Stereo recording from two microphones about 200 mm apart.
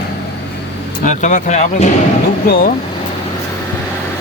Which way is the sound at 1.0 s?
40° left (ahead or behind).